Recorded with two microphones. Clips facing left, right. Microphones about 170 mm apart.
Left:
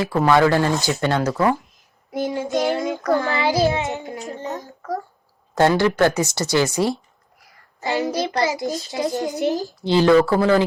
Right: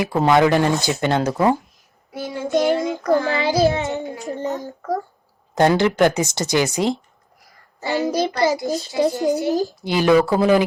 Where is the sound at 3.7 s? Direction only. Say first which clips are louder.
Right 1 dB; 20° left (ahead or behind).